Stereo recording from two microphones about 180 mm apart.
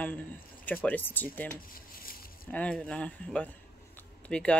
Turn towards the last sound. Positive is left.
turn(degrees=5)  # may be behind; listen again after turning